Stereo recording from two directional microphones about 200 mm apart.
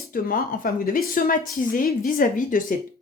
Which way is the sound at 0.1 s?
45° left (ahead or behind).